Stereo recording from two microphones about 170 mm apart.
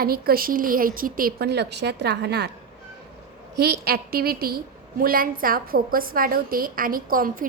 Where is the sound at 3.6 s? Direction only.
65° right (ahead or behind).